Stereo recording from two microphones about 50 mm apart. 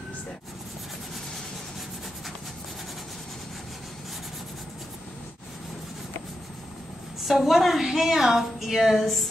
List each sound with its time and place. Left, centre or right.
7.2 s a woman's voice: centre
8.9 s female singing: centre